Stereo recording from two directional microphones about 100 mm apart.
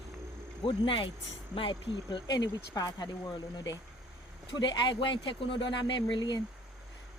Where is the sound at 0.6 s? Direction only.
55° left (ahead or behind).